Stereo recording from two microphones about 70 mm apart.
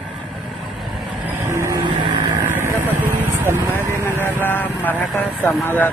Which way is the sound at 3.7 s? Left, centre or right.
Left.